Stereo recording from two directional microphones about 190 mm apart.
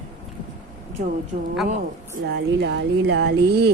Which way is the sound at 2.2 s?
65° right (ahead or behind).